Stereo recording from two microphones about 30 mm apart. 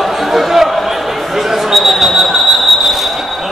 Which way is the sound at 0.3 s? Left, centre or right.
Centre.